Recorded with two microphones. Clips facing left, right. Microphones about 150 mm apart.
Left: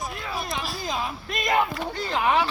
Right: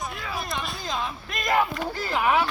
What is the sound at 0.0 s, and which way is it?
Speech, centre (ahead or behind).